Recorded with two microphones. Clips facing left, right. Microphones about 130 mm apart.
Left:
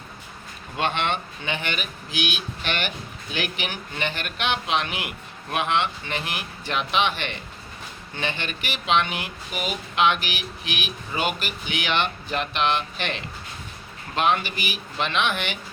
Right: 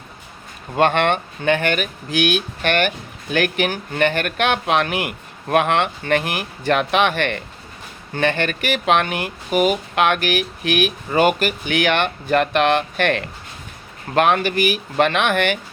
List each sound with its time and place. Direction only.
0.8 s speech: 55° right (ahead or behind)